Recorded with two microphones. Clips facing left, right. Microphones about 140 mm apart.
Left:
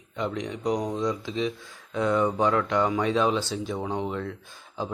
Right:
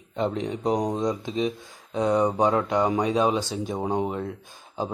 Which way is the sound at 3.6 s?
40° right (ahead or behind).